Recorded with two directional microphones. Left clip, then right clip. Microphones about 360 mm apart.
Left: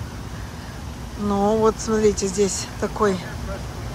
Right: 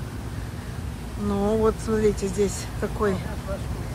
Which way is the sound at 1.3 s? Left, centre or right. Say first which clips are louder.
Left 4 dB; centre.